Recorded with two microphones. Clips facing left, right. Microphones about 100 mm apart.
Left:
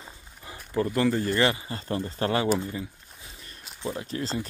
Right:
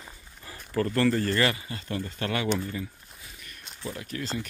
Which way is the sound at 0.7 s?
15° left (ahead or behind).